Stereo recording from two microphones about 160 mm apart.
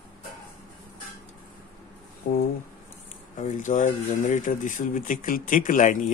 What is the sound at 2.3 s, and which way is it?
Speech, 65° left (ahead or behind).